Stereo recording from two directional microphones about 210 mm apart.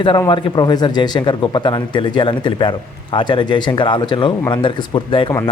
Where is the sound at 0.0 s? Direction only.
20° left (ahead or behind).